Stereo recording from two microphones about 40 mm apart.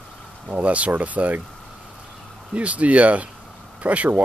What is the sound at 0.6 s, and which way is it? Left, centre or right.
Speech, right.